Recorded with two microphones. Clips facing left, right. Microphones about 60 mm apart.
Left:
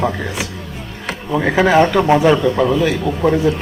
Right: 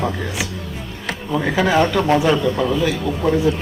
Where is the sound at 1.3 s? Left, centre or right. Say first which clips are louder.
Left 4 dB; left.